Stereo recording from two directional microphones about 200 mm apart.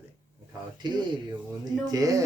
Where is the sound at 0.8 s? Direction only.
20° right (ahead or behind).